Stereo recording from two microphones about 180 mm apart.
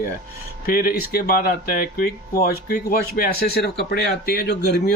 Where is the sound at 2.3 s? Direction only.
60° left (ahead or behind).